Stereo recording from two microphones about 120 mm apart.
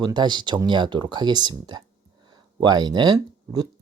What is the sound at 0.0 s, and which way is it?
Speech, 40° right (ahead or behind).